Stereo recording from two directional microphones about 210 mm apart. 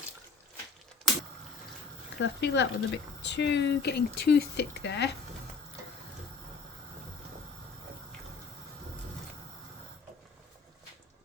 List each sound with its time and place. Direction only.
2.1 s speech: 55° left (ahead or behind)